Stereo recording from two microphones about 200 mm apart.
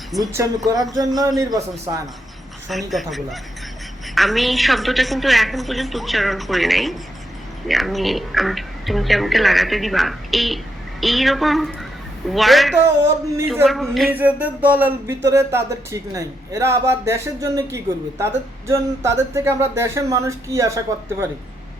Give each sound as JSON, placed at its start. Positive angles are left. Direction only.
{"t": 0.2, "sound": "a man's voice", "side_deg": -15}
{"t": 2.6, "sound": "speech", "side_deg": 0}
{"t": 13.0, "sound": "speech", "side_deg": -15}
{"t": 13.7, "sound": "speech", "side_deg": 0}